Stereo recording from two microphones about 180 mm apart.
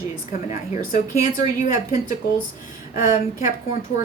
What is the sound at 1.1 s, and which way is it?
Speech, 45° left (ahead or behind).